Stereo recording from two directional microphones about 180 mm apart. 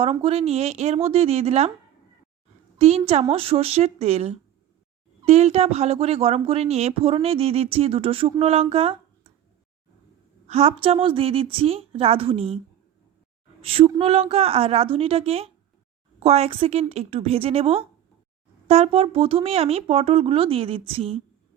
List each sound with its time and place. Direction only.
0.0 s speech: 30° right (ahead or behind)
2.7 s speech: 35° right (ahead or behind)
10.4 s speech: 35° right (ahead or behind)
13.6 s speech: 35° right (ahead or behind)